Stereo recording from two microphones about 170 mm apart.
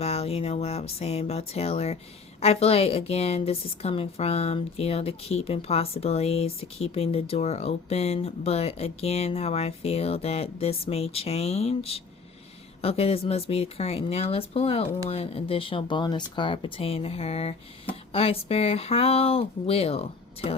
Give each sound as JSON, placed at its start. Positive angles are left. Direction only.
{"t": 0.0, "sound": "a woman's voice", "side_deg": 35}